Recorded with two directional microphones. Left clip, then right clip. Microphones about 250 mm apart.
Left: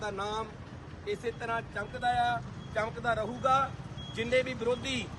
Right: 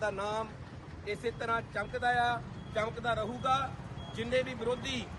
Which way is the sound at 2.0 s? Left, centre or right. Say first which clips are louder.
Left 1 dB; centre.